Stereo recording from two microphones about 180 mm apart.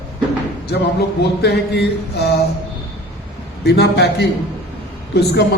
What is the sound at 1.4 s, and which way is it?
Speech, 65° left (ahead or behind).